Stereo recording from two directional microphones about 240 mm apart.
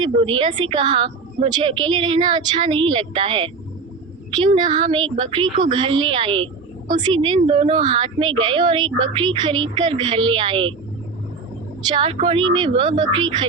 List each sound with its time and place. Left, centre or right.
0.0 s a woman's voice: centre
4.8 s a woman's voice: centre
11.8 s a woman's voice: centre